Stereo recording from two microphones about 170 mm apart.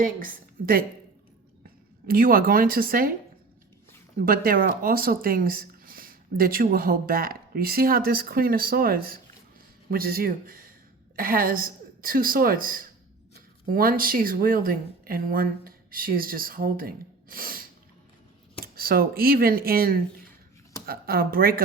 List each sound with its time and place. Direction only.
0.0 s speech: 55° right (ahead or behind)
2.0 s speech: 60° right (ahead or behind)
4.3 s speech: 60° right (ahead or behind)